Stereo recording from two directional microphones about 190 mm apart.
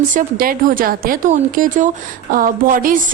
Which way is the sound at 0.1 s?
45° right (ahead or behind).